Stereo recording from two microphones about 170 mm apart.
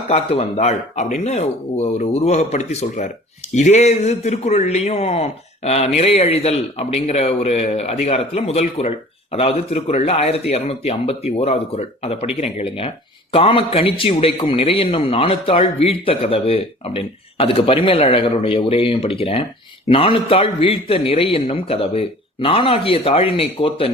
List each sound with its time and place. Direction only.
0.1 s a man's voice: 35° left (ahead or behind)